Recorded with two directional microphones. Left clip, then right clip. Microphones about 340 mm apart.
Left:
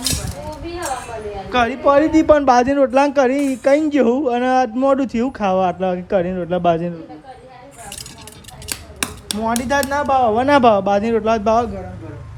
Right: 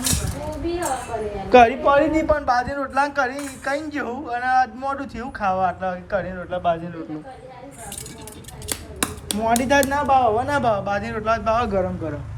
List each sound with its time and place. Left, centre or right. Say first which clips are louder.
0.0 s a sound: left 2 dB; centre
1.0 s speech: even; centre
2.1 s speech: left 7 dB; centre
8.7 s scissors: left 2 dB; centre
9.6 s speech: left 1 dB; centre